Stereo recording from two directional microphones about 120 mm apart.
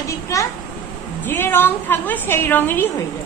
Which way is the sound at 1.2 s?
15° left (ahead or behind).